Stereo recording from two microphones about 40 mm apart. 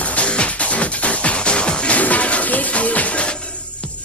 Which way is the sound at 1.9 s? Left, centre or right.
Left.